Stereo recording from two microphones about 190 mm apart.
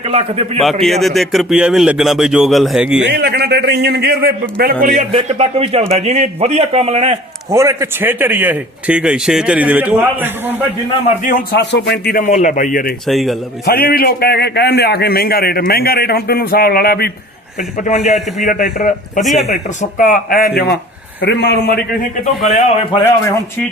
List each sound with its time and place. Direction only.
0.0 s a man's voice: 30° right (ahead or behind)
0.6 s a man's voice: centre (ahead or behind)
3.0 s a man's voice: 60° right (ahead or behind)
5.1 s a man's voice: 30° right (ahead or behind)
7.5 s a man's voice: 15° right (ahead or behind)
11.2 s speech: 45° left (ahead or behind)
11.7 s speech: 60° left (ahead or behind)
13.1 s a man's voice: centre (ahead or behind)
13.7 s a man's voice: 50° left (ahead or behind)
17.6 s a man's voice: 40° left (ahead or behind)
18.0 s a man's voice: centre (ahead or behind)
18.4 s speech: 45° left (ahead or behind)
19.2 s a man's voice: centre (ahead or behind)
19.5 s a man's voice: 40° left (ahead or behind); by 21.8 s 60° left (ahead or behind)